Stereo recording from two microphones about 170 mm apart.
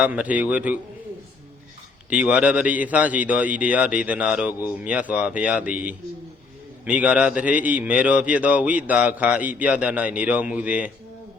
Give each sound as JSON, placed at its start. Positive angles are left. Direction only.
{"t": 0.0, "sound": "a man's voice", "side_deg": -5}
{"t": 2.0, "sound": "a man's voice", "side_deg": -5}